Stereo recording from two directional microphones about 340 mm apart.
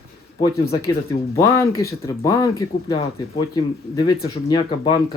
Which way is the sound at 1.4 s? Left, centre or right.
Centre.